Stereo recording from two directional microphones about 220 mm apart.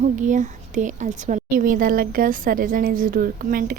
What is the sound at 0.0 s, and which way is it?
A woman's voice, 35° right (ahead or behind).